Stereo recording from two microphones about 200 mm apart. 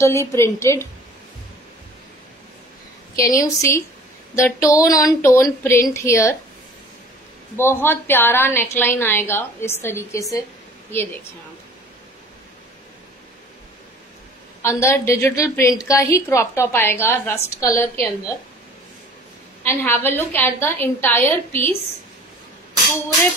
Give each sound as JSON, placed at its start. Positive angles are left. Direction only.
{"t": 0.0, "sound": "a woman's voice", "side_deg": 15}
{"t": 3.2, "sound": "a woman's voice", "side_deg": 15}
{"t": 7.5, "sound": "a woman's voice", "side_deg": 10}
{"t": 14.6, "sound": "a woman's voice", "side_deg": 15}
{"t": 19.6, "sound": "a woman's voice", "side_deg": 10}